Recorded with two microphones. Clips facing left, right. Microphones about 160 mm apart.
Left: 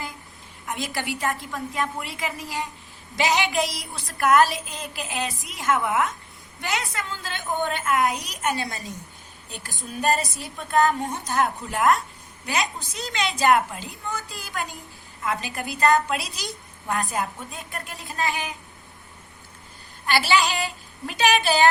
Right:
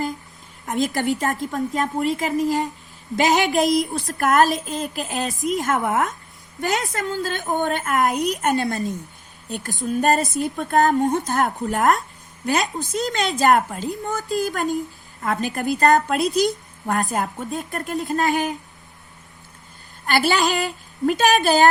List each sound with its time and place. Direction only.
0.6 s a woman's voice: 45° right (ahead or behind)
10.0 s a woman's voice: 50° right (ahead or behind)
20.1 s a woman's voice: 50° right (ahead or behind)